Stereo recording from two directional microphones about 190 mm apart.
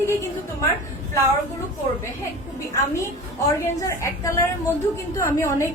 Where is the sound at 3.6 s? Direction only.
15° left (ahead or behind).